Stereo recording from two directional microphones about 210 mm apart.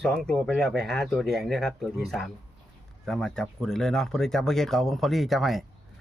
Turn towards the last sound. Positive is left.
turn(degrees=0)  # may be behind; listen again after turning